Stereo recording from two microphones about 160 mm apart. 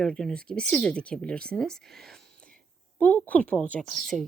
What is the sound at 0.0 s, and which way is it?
Speech, 5° left (ahead or behind).